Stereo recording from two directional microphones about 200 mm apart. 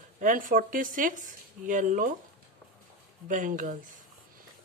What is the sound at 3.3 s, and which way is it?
Speech, 40° right (ahead or behind).